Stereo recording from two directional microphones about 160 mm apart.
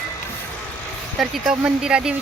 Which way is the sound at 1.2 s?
Centre (ahead or behind).